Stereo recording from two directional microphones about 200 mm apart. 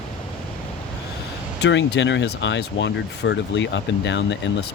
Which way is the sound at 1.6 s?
60° left (ahead or behind).